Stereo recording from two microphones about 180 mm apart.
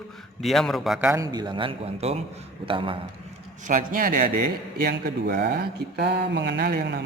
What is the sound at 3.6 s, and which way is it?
Speech, 45° right (ahead or behind).